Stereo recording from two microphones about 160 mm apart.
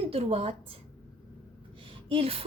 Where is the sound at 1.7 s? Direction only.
35° right (ahead or behind).